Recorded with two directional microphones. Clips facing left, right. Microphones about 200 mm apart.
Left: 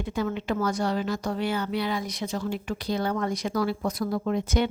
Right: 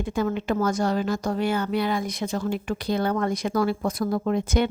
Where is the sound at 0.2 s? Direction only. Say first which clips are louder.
Right 3 dB; 45° right (ahead or behind).